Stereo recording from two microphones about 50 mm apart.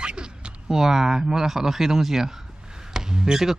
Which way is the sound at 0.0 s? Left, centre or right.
Centre.